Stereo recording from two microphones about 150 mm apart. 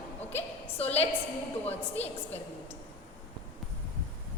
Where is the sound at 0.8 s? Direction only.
45° left (ahead or behind).